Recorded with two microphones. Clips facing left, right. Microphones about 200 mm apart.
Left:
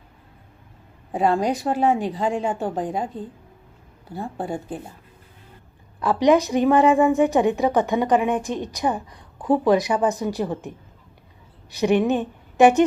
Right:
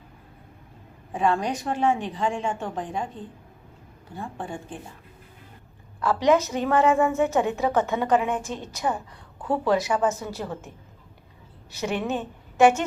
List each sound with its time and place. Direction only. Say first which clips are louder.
1.1 s speech: left 4 dB; 35° left (ahead or behind)
4.1 s speech: left 6 dB; 35° left (ahead or behind)
6.0 s a woman's voice: left 3 dB; 15° left (ahead or behind)
11.7 s a woman's voice: left 8 dB; 15° left (ahead or behind)